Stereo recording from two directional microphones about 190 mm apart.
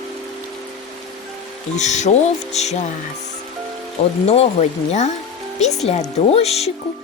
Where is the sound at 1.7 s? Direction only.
35° left (ahead or behind).